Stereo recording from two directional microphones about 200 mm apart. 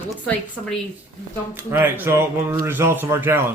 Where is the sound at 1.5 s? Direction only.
10° right (ahead or behind).